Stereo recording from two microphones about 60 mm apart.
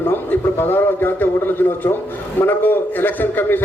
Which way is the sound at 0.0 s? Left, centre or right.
Left.